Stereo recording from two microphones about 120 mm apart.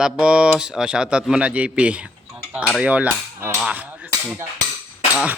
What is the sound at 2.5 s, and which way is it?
Cutlery, 10° right (ahead or behind).